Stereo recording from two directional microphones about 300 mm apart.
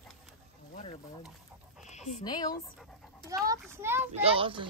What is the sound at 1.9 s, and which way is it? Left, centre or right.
Speech, left.